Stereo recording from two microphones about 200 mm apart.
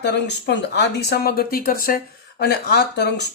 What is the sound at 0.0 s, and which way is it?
Speech, 55° left (ahead or behind).